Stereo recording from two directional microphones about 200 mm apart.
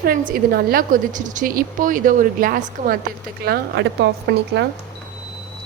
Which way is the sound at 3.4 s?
55° right (ahead or behind).